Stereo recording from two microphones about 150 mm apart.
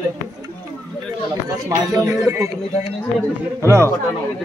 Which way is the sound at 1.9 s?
20° right (ahead or behind).